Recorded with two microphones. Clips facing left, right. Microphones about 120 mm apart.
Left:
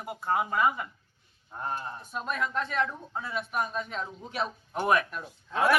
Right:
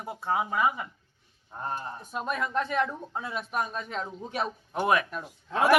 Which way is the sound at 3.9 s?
40° right (ahead or behind).